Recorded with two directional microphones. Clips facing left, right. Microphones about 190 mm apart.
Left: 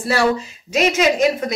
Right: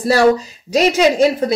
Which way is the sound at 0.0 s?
40° right (ahead or behind).